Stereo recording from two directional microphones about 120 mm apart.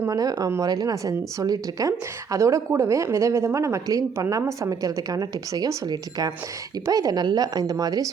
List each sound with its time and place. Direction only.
0.0 s speech: 30° right (ahead or behind)